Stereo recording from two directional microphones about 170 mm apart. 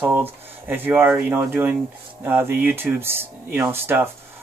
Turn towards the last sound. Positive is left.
turn(degrees=-15)  # may be behind; listen again after turning